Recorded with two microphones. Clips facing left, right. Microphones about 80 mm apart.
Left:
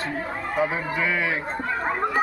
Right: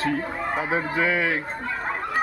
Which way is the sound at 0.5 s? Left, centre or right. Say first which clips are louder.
Left 1 dB; right.